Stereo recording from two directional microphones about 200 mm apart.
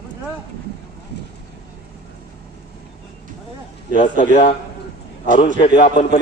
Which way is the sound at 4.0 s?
40° left (ahead or behind).